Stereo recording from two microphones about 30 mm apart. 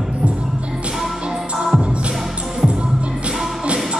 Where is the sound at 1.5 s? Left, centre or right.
Centre.